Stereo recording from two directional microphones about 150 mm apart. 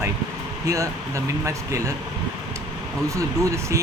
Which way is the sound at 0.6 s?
20° right (ahead or behind).